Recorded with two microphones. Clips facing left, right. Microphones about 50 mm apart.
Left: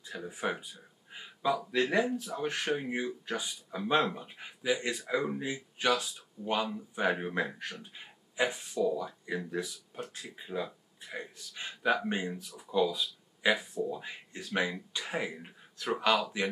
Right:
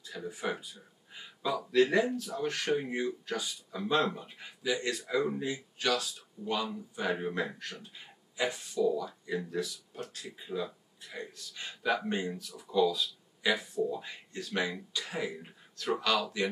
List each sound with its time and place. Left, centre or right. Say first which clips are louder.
0.2 s speech: even; left
1.8 s speech: right 6 dB; centre
7.8 s a sound: left 1 dB; left
8.8 s speech: right 1 dB; left